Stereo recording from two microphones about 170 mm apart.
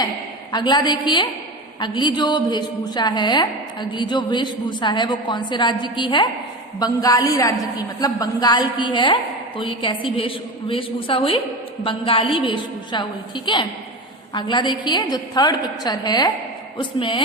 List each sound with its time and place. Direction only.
0.5 s a woman's voice: 25° left (ahead or behind)